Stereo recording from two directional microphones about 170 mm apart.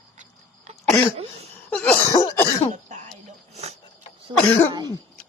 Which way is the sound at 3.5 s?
40° right (ahead or behind).